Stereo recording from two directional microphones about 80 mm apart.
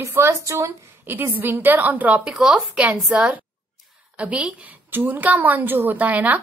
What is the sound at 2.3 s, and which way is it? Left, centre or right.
Speech, centre.